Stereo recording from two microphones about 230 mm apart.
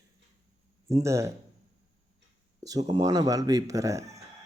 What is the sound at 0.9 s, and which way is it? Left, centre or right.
Speech, centre.